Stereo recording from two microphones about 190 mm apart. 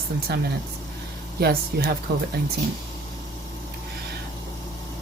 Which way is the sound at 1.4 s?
55° right (ahead or behind).